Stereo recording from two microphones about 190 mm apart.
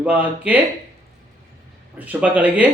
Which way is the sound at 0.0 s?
5° right (ahead or behind).